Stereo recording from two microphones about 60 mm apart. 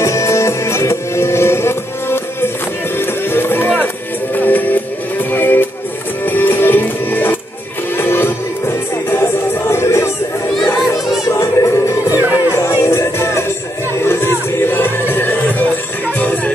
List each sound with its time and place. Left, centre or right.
0.0 s music: left
11.2 s music: left
12.1 s music: right
12.8 s music: left